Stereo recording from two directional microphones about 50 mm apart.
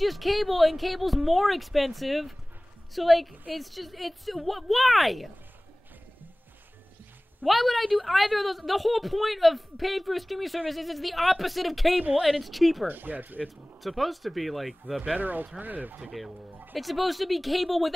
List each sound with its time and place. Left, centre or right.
0.0 s a woman's voice: centre
7.4 s a woman's voice: centre
12.8 s speech: right
13.8 s a woman's voice: centre
15.0 s speech: right
16.7 s a woman's voice: centre